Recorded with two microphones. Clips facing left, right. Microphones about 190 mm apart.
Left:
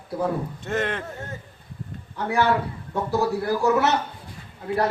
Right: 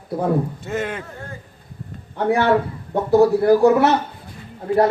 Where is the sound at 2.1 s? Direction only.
60° right (ahead or behind).